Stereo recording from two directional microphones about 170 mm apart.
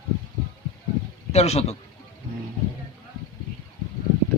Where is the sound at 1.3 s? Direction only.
40° left (ahead or behind).